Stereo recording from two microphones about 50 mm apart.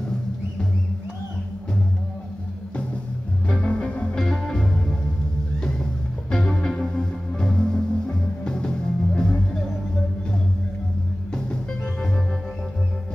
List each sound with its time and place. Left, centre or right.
3.4 s music: left